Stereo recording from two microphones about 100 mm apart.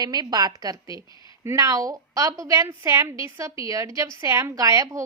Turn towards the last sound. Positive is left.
turn(degrees=-35)  # may be behind; listen again after turning